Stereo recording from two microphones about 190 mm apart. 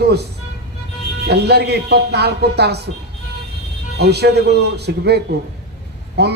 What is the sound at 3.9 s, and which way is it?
A man's voice, 60° right (ahead or behind).